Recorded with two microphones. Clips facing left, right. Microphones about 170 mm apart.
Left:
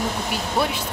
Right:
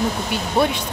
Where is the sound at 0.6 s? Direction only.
20° right (ahead or behind).